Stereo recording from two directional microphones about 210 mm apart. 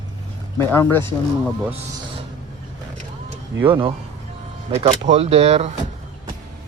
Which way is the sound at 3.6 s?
25° right (ahead or behind).